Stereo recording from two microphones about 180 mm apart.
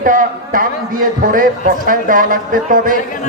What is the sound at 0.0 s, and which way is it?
A man's voice, 50° right (ahead or behind).